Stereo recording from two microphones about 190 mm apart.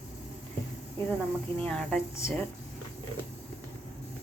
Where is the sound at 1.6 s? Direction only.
5° left (ahead or behind).